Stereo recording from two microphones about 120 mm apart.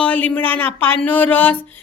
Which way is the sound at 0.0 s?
10° left (ahead or behind).